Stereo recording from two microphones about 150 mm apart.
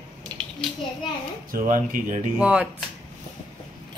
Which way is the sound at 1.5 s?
70° right (ahead or behind).